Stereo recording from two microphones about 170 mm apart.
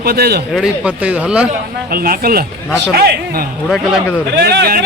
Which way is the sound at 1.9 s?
60° right (ahead or behind).